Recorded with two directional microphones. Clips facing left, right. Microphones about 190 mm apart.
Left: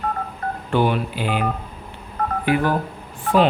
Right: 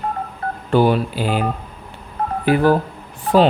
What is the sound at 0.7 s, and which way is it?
Speech, 35° right (ahead or behind).